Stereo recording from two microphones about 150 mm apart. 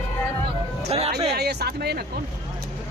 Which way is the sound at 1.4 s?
90° right.